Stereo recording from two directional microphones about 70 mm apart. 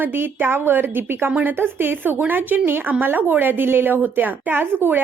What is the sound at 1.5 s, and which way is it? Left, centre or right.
A woman's voice, right.